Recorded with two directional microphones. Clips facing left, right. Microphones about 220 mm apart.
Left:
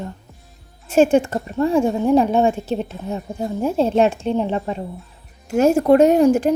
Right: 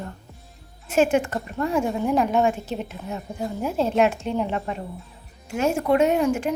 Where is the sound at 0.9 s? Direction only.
30° left (ahead or behind).